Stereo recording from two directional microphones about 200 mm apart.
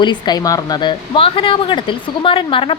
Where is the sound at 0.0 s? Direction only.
20° left (ahead or behind).